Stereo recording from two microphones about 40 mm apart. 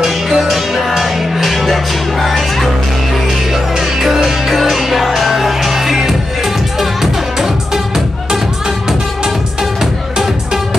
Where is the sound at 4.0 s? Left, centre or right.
Centre.